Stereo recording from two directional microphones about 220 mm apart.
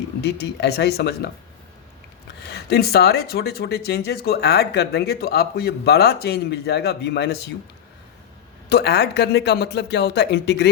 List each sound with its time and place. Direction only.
0.2 s speech: 50° left (ahead or behind)
2.5 s speech: 45° left (ahead or behind)
8.7 s speech: 50° left (ahead or behind)